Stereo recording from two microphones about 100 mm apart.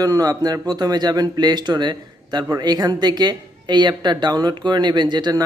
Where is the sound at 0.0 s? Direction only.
40° right (ahead or behind).